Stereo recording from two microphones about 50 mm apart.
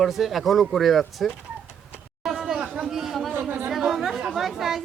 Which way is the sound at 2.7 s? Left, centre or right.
Centre.